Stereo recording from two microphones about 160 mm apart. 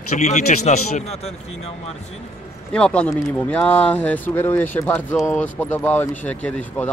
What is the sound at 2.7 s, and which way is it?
Speech, 5° left (ahead or behind).